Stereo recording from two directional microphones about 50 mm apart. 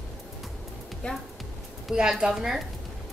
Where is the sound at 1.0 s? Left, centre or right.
Left.